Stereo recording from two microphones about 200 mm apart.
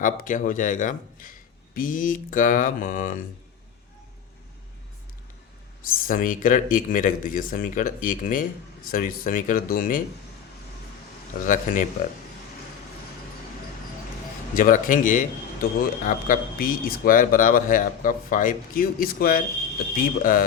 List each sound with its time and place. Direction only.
0.0 s speech: 40° left (ahead or behind)
5.8 s speech: 45° left (ahead or behind)
11.3 s speech: 40° left (ahead or behind)
14.5 s speech: 45° left (ahead or behind)